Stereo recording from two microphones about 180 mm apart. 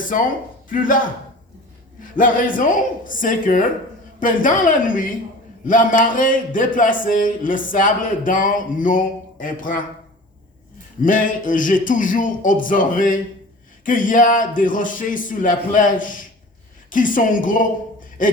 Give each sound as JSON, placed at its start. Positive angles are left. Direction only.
{"t": 0.7, "sound": "speech", "side_deg": 50}
{"t": 11.0, "sound": "speech", "side_deg": 50}